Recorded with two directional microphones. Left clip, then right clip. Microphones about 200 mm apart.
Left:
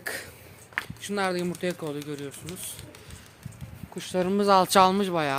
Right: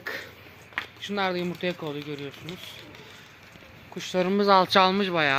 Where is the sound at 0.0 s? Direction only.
10° left (ahead or behind).